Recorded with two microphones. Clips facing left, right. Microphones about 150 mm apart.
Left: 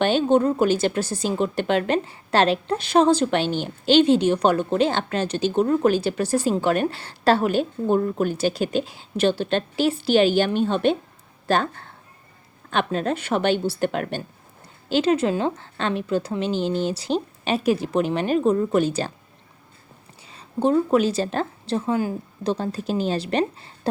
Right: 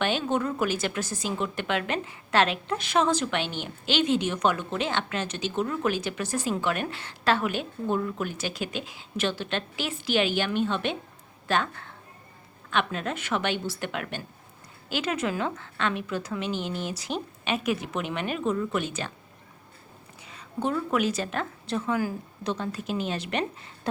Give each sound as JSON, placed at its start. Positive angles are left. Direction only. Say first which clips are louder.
{"t": 0.0, "sound": "a woman's voice", "louder": "left 8 dB", "side_deg": 30}
{"t": 20.2, "sound": "a woman's voice", "louder": "left 8 dB", "side_deg": 30}